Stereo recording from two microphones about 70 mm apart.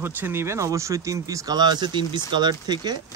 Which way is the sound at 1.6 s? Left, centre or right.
Right.